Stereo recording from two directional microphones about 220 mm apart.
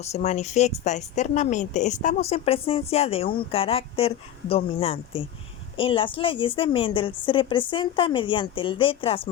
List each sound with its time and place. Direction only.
0.0 s speech: 30° left (ahead or behind)